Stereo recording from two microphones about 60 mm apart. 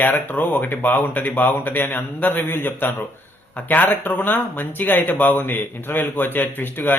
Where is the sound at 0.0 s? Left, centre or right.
Left.